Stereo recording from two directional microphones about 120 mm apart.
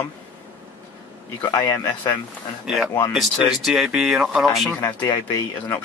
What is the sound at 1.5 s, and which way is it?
Speech, 35° left (ahead or behind).